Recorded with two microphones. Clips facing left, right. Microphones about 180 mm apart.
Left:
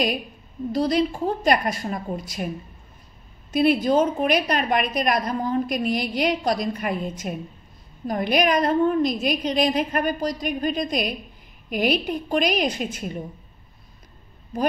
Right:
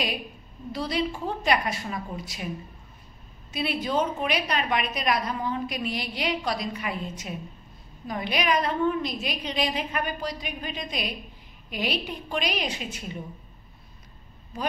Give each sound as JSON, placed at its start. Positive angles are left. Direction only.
{"t": 0.7, "sound": "a woman's voice", "side_deg": 40}
{"t": 3.5, "sound": "a woman's voice", "side_deg": 45}